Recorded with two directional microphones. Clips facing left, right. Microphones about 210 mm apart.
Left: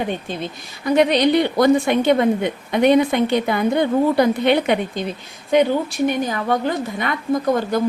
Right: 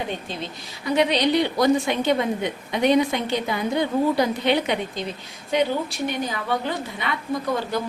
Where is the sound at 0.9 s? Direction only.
55° left (ahead or behind).